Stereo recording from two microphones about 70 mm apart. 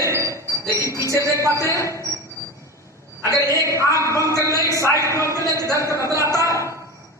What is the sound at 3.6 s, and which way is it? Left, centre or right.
Music, right.